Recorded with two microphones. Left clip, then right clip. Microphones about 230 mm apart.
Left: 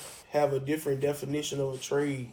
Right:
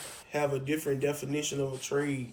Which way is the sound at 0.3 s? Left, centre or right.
Centre.